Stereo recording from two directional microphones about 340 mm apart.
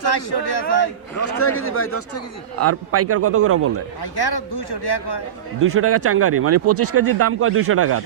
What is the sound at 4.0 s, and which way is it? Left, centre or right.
A man's voice, left.